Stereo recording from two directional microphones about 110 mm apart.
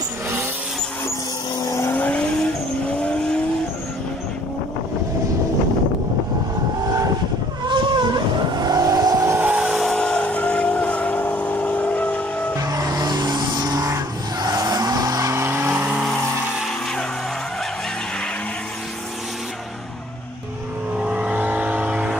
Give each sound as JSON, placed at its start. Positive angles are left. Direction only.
{"t": 1.6, "sound": "vehicle", "side_deg": 25}
{"t": 2.0, "sound": "vehicle", "side_deg": 10}
{"t": 7.6, "sound": "vehicle", "side_deg": -45}
{"t": 9.4, "sound": "vehicle", "side_deg": -10}
{"t": 9.8, "sound": "vehicle", "side_deg": 10}
{"t": 12.5, "sound": "vehicle", "side_deg": -35}
{"t": 21.0, "sound": "vehicle", "side_deg": -10}